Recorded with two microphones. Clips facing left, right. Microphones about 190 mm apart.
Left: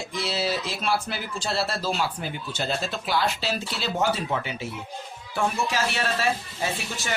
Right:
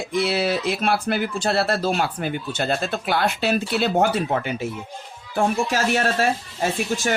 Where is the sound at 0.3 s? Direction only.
60° right (ahead or behind).